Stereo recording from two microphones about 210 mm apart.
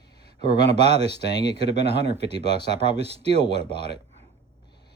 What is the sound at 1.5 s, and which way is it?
Speech, 55° left (ahead or behind).